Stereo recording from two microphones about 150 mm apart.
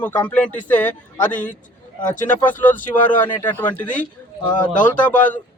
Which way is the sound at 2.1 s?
60° left (ahead or behind).